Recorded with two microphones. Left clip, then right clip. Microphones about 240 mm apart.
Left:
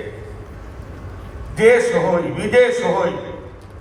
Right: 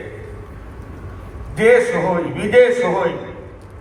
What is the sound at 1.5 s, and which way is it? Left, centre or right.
Speech, right.